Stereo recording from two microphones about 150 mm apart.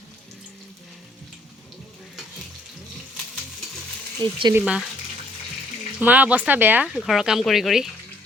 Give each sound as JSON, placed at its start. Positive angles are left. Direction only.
{"t": 4.2, "sound": "speech", "side_deg": -25}
{"t": 4.5, "sound": "speech", "side_deg": -5}
{"t": 6.0, "sound": "speech", "side_deg": -10}
{"t": 6.8, "sound": "speech", "side_deg": 0}